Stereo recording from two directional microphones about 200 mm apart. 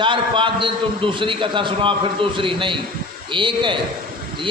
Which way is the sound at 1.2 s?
25° right (ahead or behind).